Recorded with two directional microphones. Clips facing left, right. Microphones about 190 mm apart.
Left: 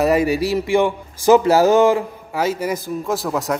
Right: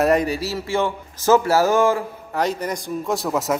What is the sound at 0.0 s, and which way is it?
Speech, 5° left (ahead or behind).